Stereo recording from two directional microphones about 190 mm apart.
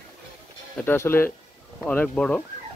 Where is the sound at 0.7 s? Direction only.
10° left (ahead or behind).